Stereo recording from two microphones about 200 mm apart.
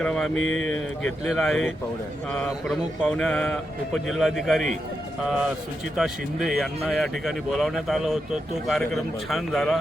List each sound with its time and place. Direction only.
0.0 s speech: 5° left (ahead or behind)
0.3 s speech: 80° left
0.6 s speech: centre (ahead or behind)
6.0 s speech: centre (ahead or behind)